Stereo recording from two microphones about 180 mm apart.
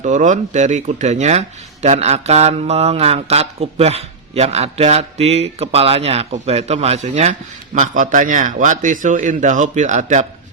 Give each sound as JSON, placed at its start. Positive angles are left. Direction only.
{"t": 0.0, "sound": "speech", "side_deg": -40}